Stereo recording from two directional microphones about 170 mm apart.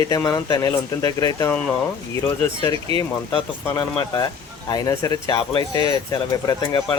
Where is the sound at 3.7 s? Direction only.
25° left (ahead or behind).